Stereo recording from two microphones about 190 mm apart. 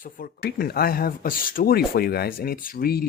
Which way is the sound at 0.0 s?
50° left (ahead or behind).